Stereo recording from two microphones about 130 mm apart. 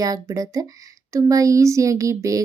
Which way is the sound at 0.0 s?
25° right (ahead or behind).